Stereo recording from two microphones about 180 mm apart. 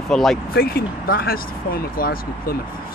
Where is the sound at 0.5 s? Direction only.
55° left (ahead or behind).